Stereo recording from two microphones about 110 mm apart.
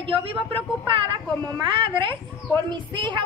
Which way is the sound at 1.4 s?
40° right (ahead or behind).